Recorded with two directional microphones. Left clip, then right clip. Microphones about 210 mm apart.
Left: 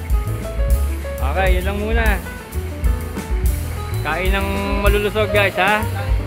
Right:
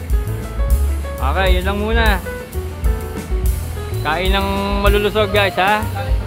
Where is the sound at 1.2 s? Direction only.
10° right (ahead or behind).